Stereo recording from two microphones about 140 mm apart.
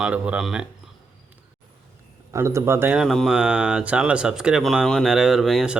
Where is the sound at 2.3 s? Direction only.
20° right (ahead or behind).